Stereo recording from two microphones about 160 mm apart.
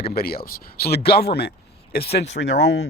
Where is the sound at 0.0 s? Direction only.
70° left (ahead or behind).